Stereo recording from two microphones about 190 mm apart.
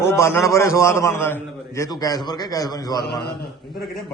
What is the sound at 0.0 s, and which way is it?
A man's voice, 15° left (ahead or behind).